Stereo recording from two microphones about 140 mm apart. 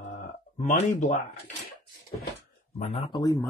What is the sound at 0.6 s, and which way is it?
Speech, 60° left (ahead or behind).